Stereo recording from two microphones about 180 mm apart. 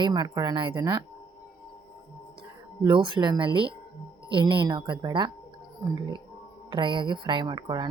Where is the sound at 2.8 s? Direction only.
25° right (ahead or behind).